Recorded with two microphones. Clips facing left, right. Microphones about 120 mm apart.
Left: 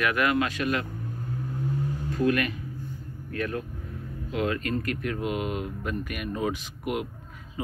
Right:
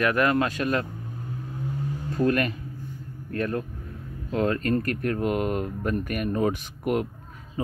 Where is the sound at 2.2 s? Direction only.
40° right (ahead or behind).